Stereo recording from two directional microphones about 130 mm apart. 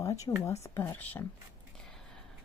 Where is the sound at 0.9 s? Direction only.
10° left (ahead or behind).